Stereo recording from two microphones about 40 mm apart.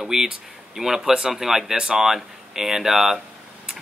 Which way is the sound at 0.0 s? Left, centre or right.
Centre.